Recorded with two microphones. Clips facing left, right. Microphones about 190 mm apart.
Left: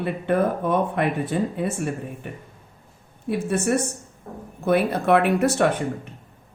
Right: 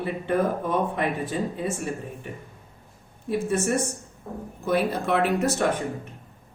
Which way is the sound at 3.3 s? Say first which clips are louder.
Left 2 dB; 65° left (ahead or behind).